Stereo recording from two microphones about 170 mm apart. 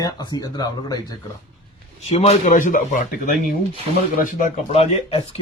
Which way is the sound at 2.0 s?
35° left (ahead or behind).